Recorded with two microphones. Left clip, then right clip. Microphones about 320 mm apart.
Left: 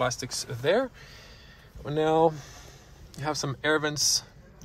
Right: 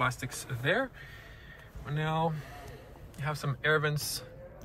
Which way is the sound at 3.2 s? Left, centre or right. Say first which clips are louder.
Left 5 dB; centre.